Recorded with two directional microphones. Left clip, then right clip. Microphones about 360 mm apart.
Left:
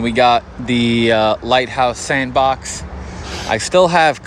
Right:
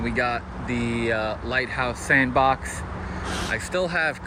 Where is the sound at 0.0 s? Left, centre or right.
Left.